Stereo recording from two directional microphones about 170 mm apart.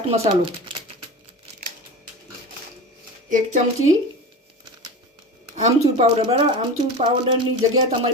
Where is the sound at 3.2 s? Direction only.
50° right (ahead or behind).